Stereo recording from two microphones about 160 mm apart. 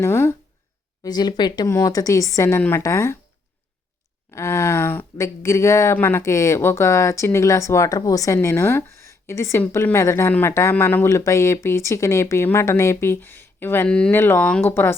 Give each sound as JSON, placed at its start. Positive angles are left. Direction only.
{"t": 0.0, "sound": "speech", "side_deg": 15}
{"t": 4.3, "sound": "speech", "side_deg": 15}